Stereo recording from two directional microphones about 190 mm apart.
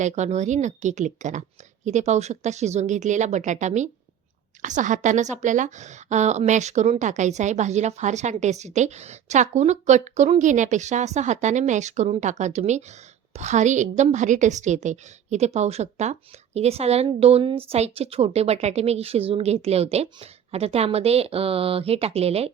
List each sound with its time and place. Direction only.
0.0 s a woman's voice: 40° right (ahead or behind)